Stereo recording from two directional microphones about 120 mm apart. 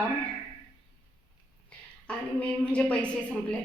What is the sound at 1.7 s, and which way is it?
A woman's voice, 10° left (ahead or behind).